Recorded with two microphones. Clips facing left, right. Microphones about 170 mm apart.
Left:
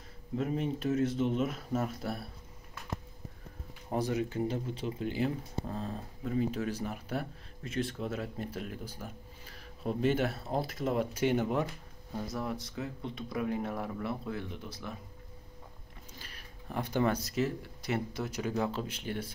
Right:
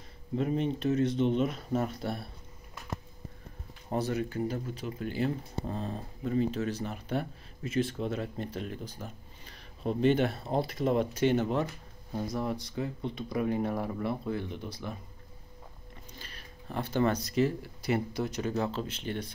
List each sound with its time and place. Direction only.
0.4 s speech: 5° left (ahead or behind)
3.9 s speech: 15° left (ahead or behind)
5.7 s speech: centre (ahead or behind)
12.3 s speech: centre (ahead or behind)
16.2 s speech: 10° left (ahead or behind)